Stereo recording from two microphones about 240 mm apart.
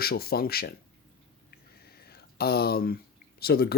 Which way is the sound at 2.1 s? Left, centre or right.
Left.